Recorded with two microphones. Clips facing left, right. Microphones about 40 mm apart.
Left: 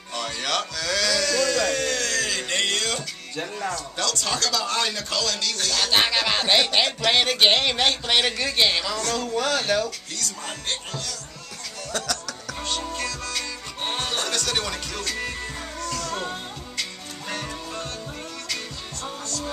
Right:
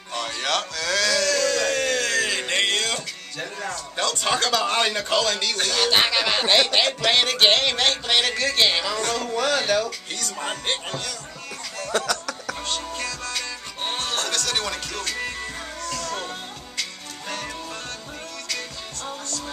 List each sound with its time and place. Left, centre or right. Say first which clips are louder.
0.1 s sheep: right 2 dB; centre
3.9 s speech: right 2 dB; right
4.3 s speech: right 6 dB; right
5.9 s speech: even; centre
8.6 s speech: right 1 dB; centre
9.8 s speech: right 1 dB; right
12.0 s music: right 3 dB; right
12.5 s music: left 5 dB; centre